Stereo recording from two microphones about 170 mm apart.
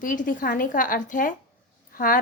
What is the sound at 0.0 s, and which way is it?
A woman's voice, 50° left (ahead or behind).